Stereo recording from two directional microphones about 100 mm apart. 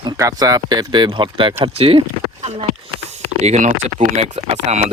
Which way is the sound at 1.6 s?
70° right (ahead or behind).